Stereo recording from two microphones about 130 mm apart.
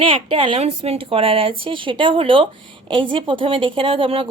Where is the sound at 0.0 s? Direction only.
45° right (ahead or behind).